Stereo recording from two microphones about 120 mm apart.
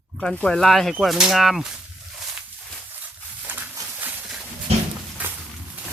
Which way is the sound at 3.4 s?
15° right (ahead or behind).